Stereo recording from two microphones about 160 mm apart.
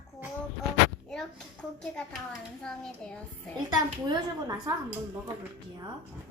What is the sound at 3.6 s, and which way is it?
A child's voice, 25° right (ahead or behind).